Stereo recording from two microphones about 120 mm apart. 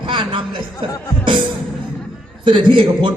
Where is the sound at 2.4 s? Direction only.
45° right (ahead or behind).